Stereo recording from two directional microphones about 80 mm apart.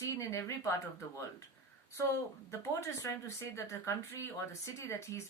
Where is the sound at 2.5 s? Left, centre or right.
Left.